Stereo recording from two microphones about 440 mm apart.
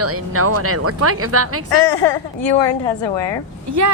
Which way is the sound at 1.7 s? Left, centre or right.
Left.